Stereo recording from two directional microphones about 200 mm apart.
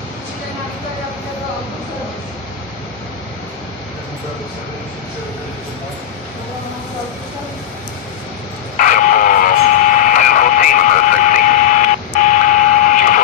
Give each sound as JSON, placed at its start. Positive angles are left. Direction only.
{"t": 8.7, "sound": "radio", "side_deg": 40}